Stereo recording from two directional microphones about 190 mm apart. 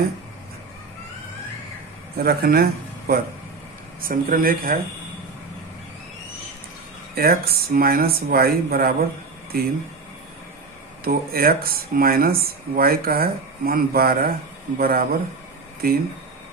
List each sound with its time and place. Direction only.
2.1 s speech: 50° right (ahead or behind)
7.2 s speech: 50° right (ahead or behind)
11.0 s speech: 50° right (ahead or behind)